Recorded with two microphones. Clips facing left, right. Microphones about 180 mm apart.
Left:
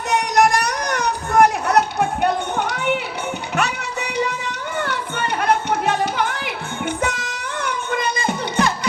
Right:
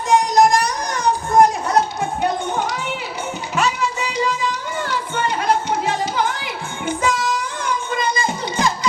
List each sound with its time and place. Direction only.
0.1 s children playing: 65° left (ahead or behind)
3.5 s music: 60° left (ahead or behind)